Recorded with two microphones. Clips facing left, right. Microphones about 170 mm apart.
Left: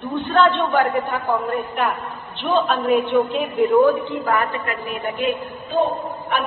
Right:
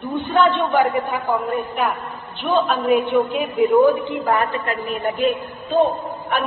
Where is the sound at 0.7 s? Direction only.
Centre (ahead or behind).